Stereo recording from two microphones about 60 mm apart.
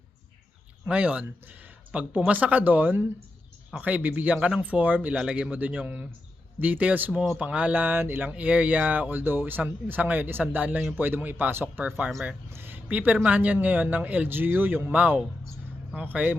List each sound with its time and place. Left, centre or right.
0.9 s speech: right
5.1 s speech: centre